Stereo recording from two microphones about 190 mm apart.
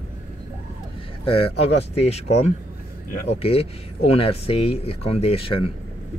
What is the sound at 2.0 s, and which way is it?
Speech, 35° left (ahead or behind).